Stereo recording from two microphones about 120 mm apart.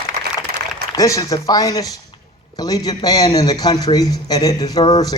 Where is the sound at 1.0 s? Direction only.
25° left (ahead or behind).